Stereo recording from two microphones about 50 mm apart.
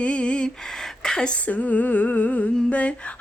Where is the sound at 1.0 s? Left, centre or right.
Centre.